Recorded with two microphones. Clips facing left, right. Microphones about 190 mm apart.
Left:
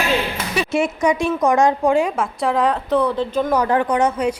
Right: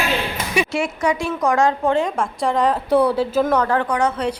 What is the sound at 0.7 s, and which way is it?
A woman's voice, 20° left (ahead or behind).